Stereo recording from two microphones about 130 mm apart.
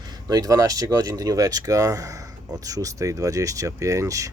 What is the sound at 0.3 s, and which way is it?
Speech, 30° right (ahead or behind).